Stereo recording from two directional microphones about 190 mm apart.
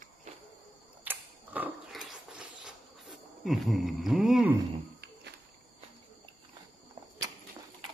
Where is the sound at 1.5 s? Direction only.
5° right (ahead or behind).